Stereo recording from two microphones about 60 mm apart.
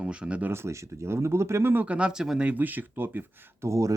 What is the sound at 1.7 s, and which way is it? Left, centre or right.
Speech, right.